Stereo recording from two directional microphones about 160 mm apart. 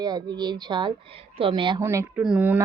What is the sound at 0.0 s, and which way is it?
Speech, 25° right (ahead or behind).